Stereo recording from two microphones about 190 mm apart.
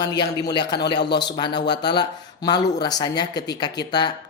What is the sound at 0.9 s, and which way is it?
Speech, 60° left (ahead or behind).